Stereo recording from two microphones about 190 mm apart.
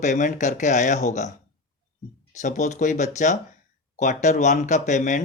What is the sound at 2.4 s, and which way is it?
Speech, 40° left (ahead or behind).